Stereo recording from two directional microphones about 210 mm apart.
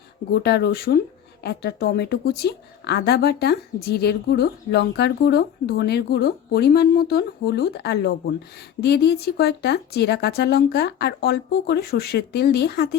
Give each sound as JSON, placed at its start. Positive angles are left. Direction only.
{"t": 0.3, "sound": "a woman's voice", "side_deg": 50}